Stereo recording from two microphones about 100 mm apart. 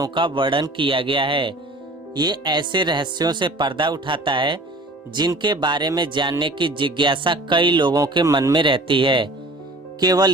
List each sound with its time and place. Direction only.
0.1 s speech: 55° right (ahead or behind)
2.1 s a man's voice: 45° right (ahead or behind)
8.5 s speech: 55° right (ahead or behind)
10.0 s speech: 45° right (ahead or behind)